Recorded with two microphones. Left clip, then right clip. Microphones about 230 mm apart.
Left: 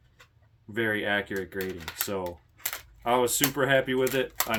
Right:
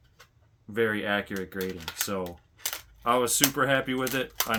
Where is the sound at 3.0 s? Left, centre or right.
Right.